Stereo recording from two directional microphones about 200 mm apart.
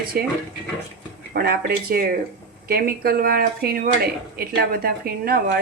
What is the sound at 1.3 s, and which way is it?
Speech, 50° right (ahead or behind).